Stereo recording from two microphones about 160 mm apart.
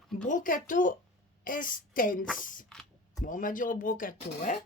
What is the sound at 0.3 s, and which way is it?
A woman's voice, 55° left (ahead or behind).